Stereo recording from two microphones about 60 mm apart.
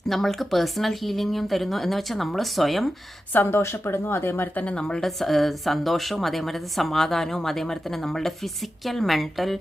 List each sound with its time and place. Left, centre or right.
0.1 s a woman's voice: centre
3.6 s speech: left
4.6 s a woman's voice: centre